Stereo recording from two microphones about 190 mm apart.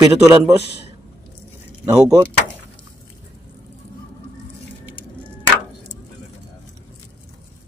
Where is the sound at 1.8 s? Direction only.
15° right (ahead or behind).